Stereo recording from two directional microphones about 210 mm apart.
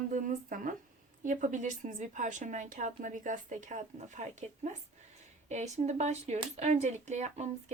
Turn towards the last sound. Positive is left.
turn(degrees=-35)  # may be behind; listen again after turning